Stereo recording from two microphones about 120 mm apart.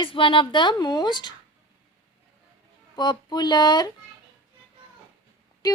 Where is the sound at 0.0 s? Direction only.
45° left (ahead or behind).